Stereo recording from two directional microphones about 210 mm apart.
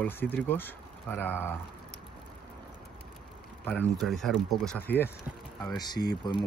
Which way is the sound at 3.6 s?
5° left (ahead or behind).